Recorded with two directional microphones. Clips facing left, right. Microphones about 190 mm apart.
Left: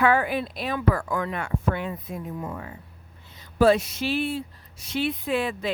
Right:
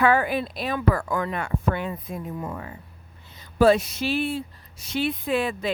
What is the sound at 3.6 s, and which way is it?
Speech, 40° right (ahead or behind).